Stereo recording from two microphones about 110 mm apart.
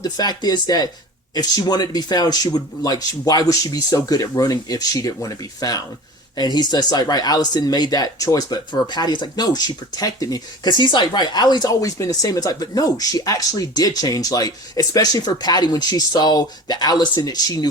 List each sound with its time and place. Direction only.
0.0 s speech: 40° left (ahead or behind)